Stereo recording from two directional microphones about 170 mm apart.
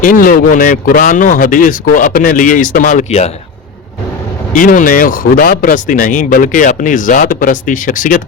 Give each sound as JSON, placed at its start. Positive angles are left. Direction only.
{"t": 0.0, "sound": "speech", "side_deg": 55}
{"t": 4.5, "sound": "speech", "side_deg": 50}